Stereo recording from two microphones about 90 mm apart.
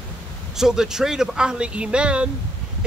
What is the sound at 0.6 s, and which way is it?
Speech, 5° right (ahead or behind).